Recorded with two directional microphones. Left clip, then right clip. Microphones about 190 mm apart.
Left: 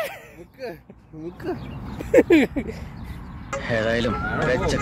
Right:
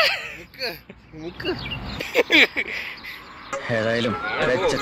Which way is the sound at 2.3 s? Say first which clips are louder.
Right 4 dB; 35° left (ahead or behind).